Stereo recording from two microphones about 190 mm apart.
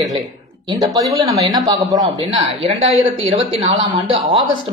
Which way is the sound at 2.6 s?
30° right (ahead or behind).